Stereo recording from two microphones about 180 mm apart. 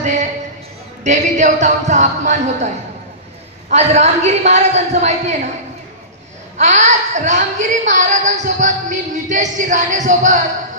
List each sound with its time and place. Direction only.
0.0 s music: 40° right (ahead or behind)
1.0 s a woman's voice: 40° right (ahead or behind)
3.7 s a woman's voice: 40° right (ahead or behind)
6.6 s a woman's voice: 40° right (ahead or behind)